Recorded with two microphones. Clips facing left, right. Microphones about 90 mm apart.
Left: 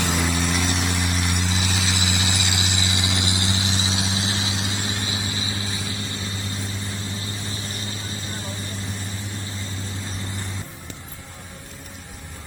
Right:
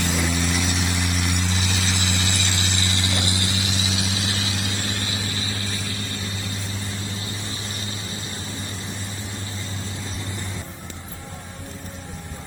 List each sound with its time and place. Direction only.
0.0 s vehicle: centre (ahead or behind); by 6.0 s 20° left (ahead or behind)
7.2 s vehicle: 30° left (ahead or behind)